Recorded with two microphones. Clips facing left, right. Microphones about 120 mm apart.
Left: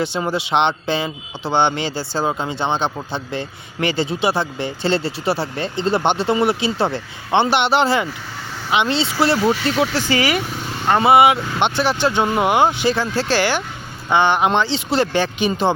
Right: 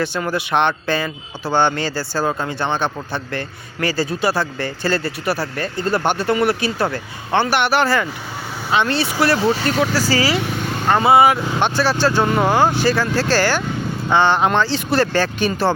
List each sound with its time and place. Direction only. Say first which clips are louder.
0.0 s speech: even; 20° left (ahead or behind)
9.4 s speech: even; 30° right (ahead or behind)
9.6 s speech: right 1 dB; 40° right (ahead or behind)
10.8 s speech: even; 20° left (ahead or behind)